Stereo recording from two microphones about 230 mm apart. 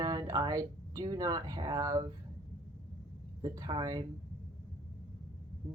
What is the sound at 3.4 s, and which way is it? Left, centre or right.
Speech, centre.